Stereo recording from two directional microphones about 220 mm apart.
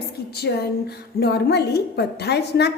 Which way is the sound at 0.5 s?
50° left (ahead or behind).